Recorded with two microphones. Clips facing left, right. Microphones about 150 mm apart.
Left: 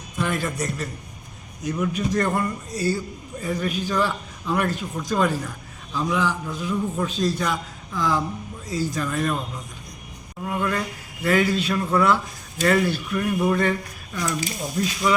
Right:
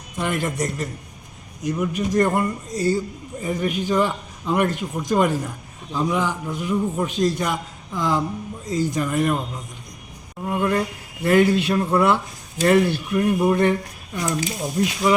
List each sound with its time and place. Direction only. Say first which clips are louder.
0.2 s a man's voice: right 2 dB; 20° right (ahead or behind)
10.4 s speech: right 4 dB; 20° right (ahead or behind)